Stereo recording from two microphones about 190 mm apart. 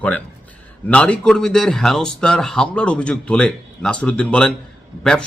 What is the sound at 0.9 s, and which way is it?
A man's voice, 5° left (ahead or behind).